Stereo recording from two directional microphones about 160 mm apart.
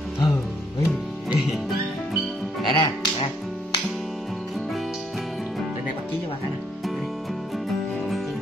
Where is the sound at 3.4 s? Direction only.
Centre (ahead or behind).